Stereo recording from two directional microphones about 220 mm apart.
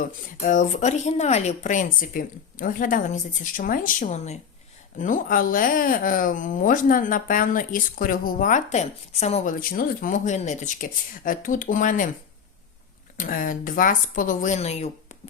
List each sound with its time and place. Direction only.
0.0 s speech: 35° left (ahead or behind)
13.1 s speech: 40° left (ahead or behind)